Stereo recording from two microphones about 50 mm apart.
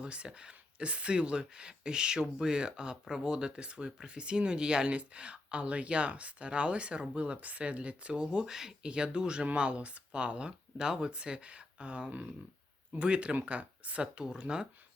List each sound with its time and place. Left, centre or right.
0.0 s speech: right